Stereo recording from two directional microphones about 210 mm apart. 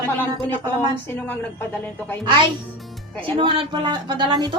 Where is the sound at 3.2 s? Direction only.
25° right (ahead or behind).